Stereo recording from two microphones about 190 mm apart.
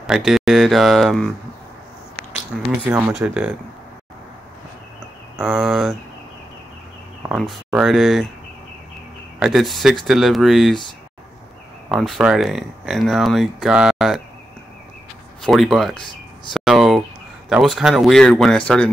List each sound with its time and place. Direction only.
0.0 s speech: centre (ahead or behind)
2.5 s speech: centre (ahead or behind)
5.4 s speech: centre (ahead or behind)
7.2 s speech: 5° right (ahead or behind)
9.4 s speech: centre (ahead or behind)
11.9 s speech: centre (ahead or behind)
15.4 s speech: centre (ahead or behind)